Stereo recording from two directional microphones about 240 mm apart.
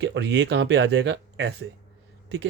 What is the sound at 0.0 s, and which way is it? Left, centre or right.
Speech, right.